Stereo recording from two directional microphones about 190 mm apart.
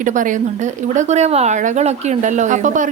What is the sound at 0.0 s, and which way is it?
Speech, 40° right (ahead or behind).